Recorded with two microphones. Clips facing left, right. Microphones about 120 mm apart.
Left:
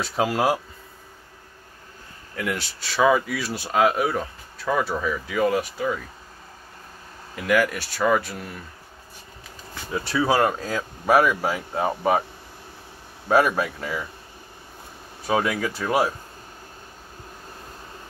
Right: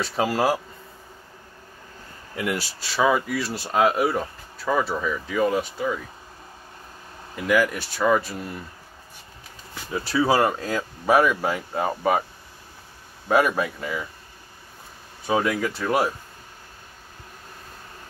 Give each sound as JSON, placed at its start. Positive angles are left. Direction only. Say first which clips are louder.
{"t": 0.0, "sound": "speech", "louder": "even", "side_deg": 0}
{"t": 2.3, "sound": "speech", "louder": "right 1 dB", "side_deg": -5}
{"t": 7.3, "sound": "speech", "louder": "even", "side_deg": 0}
{"t": 9.9, "sound": "speech", "louder": "right 1 dB", "side_deg": 0}
{"t": 13.3, "sound": "speech", "louder": "left 1 dB", "side_deg": 0}
{"t": 15.2, "sound": "speech", "louder": "even", "side_deg": 0}